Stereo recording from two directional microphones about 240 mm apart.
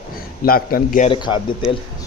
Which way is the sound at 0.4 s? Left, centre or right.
Left.